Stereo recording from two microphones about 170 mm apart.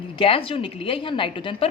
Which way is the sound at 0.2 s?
30° left (ahead or behind).